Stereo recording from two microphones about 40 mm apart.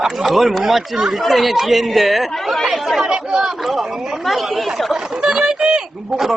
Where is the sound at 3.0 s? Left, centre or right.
Right.